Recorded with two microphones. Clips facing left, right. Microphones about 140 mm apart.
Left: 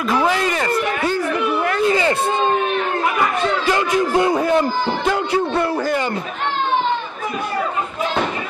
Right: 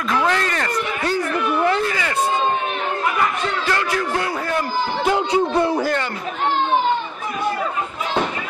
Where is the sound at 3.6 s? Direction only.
20° left (ahead or behind).